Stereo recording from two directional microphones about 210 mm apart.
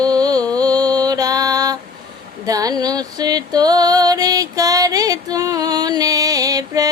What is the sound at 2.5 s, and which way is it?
Music, 15° right (ahead or behind).